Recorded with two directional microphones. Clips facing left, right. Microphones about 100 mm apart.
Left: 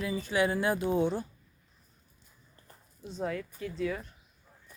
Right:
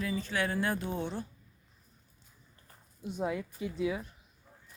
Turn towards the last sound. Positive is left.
turn(degrees=-10)  # may be behind; listen again after turning